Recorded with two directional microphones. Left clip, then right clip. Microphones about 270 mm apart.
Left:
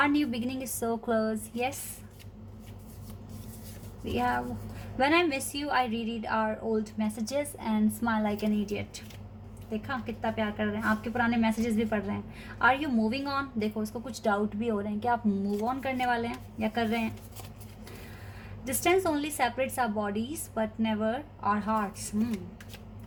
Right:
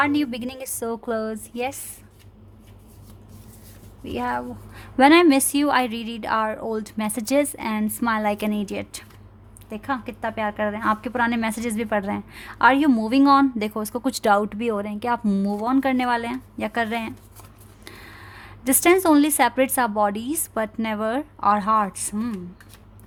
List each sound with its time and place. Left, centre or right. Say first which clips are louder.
0.0 s a woman's voice: right 5 dB; right
4.1 s a woman's voice: right 3 dB; right
18.6 s a woman's voice: right 8 dB; right